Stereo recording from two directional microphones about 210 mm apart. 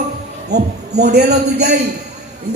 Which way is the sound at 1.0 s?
50° right (ahead or behind).